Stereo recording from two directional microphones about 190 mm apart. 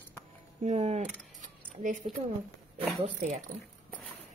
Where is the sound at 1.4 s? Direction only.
40° right (ahead or behind).